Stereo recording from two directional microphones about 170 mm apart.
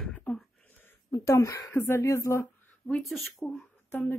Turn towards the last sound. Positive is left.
turn(degrees=15)  # may be behind; listen again after turning